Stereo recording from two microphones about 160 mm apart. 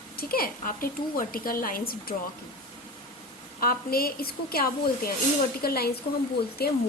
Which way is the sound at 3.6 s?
65° left (ahead or behind).